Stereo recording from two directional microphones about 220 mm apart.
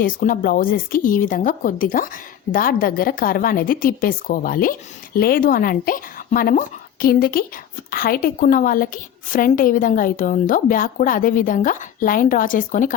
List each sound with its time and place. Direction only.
0.0 s a woman's voice: 40° left (ahead or behind)